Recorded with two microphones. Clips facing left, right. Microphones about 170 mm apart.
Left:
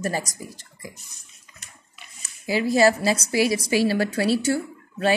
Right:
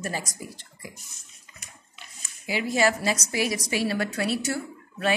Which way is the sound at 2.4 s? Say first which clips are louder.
Left 5 dB; 35° left (ahead or behind).